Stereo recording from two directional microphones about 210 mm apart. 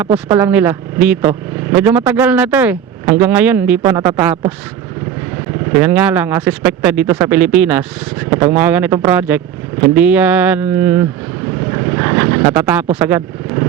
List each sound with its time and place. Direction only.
0.3 s speech: 10° right (ahead or behind)
5.7 s speech: 10° right (ahead or behind)
11.7 s vehicle: 20° right (ahead or behind)
12.6 s speech: 10° right (ahead or behind)